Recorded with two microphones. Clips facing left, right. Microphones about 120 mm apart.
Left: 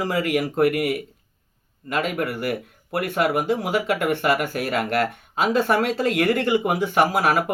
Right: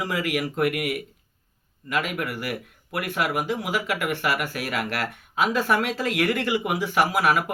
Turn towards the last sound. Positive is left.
turn(degrees=30)  # may be behind; listen again after turning